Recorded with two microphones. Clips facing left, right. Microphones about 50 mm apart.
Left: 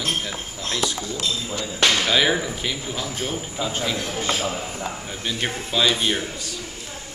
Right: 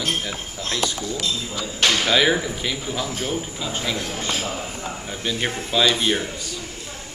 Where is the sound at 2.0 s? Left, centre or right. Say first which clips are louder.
Right 1 dB; centre.